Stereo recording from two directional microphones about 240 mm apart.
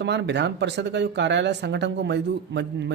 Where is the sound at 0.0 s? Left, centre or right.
Right.